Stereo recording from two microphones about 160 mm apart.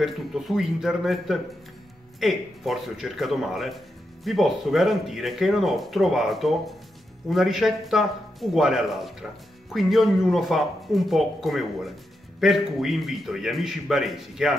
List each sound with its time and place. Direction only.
0.0 s speech: centre (ahead or behind)